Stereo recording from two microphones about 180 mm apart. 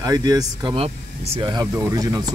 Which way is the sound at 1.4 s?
20° right (ahead or behind).